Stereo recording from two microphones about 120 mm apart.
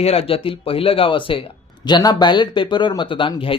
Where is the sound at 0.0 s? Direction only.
55° left (ahead or behind).